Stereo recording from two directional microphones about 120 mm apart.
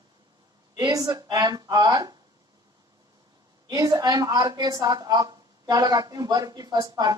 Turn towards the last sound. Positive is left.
turn(degrees=-35)  # may be behind; listen again after turning